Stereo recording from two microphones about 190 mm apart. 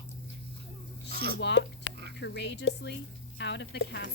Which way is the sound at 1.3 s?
65° left (ahead or behind).